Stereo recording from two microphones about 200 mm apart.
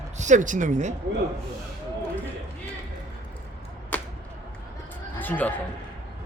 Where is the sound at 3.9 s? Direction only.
10° left (ahead or behind).